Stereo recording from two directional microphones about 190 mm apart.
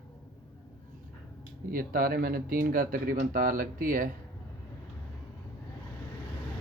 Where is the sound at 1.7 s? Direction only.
50° right (ahead or behind).